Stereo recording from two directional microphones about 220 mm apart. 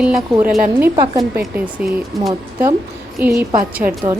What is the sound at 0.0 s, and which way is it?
A woman's voice, 5° right (ahead or behind).